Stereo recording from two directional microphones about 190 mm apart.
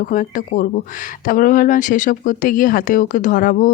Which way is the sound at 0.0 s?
45° left (ahead or behind).